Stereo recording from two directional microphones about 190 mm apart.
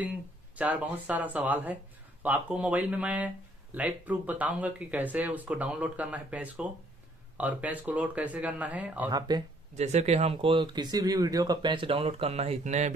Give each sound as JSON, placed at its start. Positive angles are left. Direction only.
{"t": 0.6, "sound": "speech", "side_deg": -5}
{"t": 9.8, "sound": "speech", "side_deg": -35}